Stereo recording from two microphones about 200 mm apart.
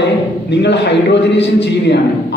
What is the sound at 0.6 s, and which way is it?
A man's voice, 60° left (ahead or behind).